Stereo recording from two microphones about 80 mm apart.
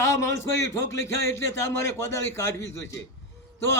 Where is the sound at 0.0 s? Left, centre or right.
Left.